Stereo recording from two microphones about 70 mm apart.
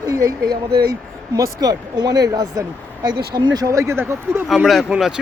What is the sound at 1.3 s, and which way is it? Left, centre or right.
Speech, right.